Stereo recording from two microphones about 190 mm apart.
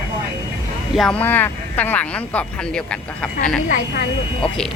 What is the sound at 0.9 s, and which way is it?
Speech, 5° left (ahead or behind).